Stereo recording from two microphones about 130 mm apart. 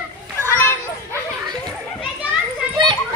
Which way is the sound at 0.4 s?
15° left (ahead or behind).